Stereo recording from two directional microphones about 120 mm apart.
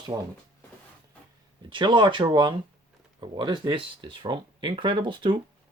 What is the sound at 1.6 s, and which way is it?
Speech, 40° right (ahead or behind).